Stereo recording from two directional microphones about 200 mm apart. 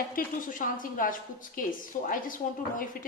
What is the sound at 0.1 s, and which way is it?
A woman's voice, 45° left (ahead or behind).